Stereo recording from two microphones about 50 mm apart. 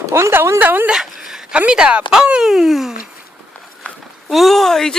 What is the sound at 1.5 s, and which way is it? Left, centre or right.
Speech, right.